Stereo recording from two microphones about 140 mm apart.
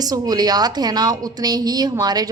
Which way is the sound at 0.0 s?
30° right (ahead or behind).